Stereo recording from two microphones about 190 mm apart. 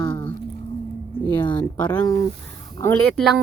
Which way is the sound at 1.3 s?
25° left (ahead or behind).